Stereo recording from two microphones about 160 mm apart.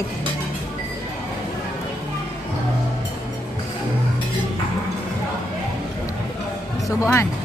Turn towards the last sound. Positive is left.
turn(degrees=20)  # may be behind; listen again after turning